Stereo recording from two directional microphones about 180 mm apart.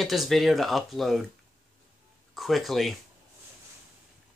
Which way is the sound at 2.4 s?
Centre (ahead or behind).